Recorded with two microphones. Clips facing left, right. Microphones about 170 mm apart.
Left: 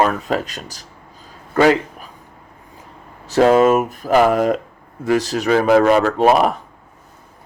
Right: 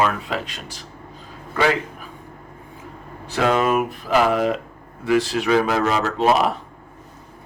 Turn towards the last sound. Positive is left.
turn(degrees=50)  # may be behind; listen again after turning